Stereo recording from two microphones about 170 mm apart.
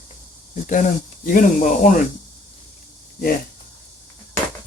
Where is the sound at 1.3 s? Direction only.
50° left (ahead or behind).